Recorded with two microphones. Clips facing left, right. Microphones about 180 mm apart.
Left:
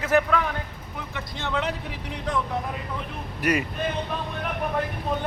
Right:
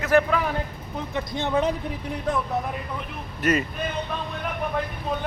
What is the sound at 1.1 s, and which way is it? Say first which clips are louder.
Speech: right 5 dB; 15° right (ahead or behind).